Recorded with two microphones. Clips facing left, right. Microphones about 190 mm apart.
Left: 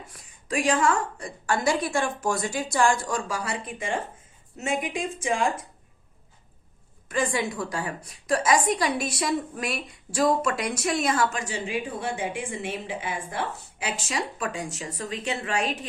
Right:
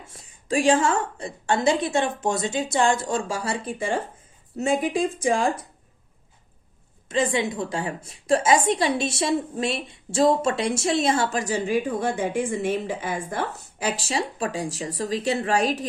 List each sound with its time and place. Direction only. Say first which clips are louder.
0.0 s a woman's voice: even; 25° right (ahead or behind)
7.1 s a woman's voice: right 3 dB; 25° right (ahead or behind)